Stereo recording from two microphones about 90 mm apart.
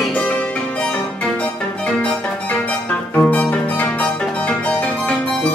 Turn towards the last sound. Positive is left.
turn(degrees=15)  # may be behind; listen again after turning